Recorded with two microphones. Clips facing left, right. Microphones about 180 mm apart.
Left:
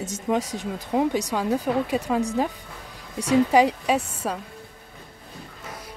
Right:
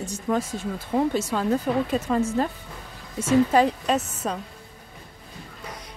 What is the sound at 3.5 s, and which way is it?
Speech, 10° left (ahead or behind).